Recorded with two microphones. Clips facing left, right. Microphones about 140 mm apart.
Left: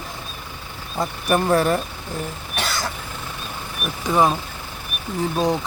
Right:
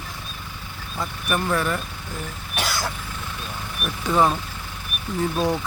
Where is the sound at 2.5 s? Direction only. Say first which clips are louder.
Even; 5° right (ahead or behind).